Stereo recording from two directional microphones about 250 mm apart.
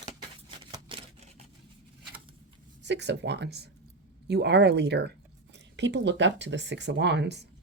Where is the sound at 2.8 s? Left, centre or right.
Right.